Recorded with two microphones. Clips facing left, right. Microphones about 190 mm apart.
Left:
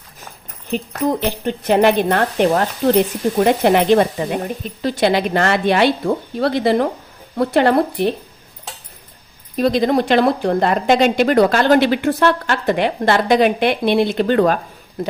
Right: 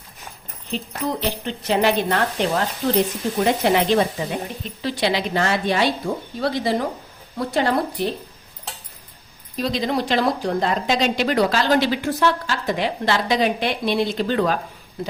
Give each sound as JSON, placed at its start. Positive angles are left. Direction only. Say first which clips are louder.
{"t": 0.7, "sound": "speech", "louder": "left 6 dB", "side_deg": 50}
{"t": 9.6, "sound": "speech", "louder": "left 7 dB", "side_deg": 55}